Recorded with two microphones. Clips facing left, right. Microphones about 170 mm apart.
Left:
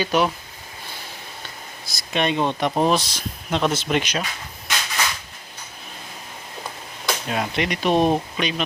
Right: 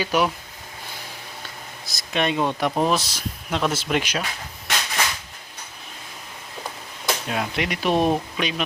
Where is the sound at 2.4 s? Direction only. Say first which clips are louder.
Left 1 dB; 20° left (ahead or behind).